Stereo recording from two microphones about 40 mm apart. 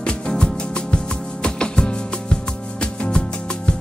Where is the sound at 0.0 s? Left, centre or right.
Left.